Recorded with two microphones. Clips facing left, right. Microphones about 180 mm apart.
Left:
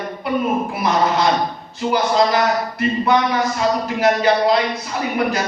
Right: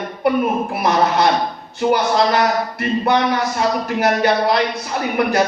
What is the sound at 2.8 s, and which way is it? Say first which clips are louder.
Speech: even; 60° right (ahead or behind).